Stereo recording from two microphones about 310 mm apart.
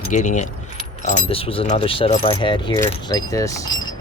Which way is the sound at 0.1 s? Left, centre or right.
Left.